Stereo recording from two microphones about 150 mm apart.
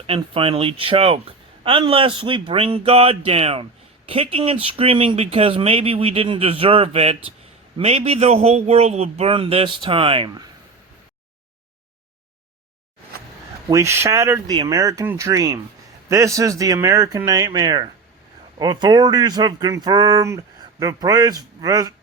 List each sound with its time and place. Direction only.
0.2 s a man's voice: 40° right (ahead or behind)
13.1 s a sound: 90° right
13.7 s speech: 20° right (ahead or behind)